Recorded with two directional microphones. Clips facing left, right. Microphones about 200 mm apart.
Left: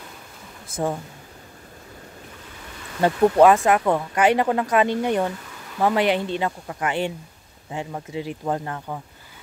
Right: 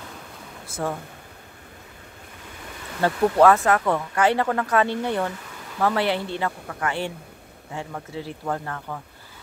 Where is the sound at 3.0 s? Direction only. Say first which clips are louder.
Left 2 dB; 15° left (ahead or behind).